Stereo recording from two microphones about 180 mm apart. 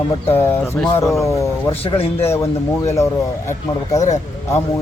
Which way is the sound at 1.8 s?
35° left (ahead or behind).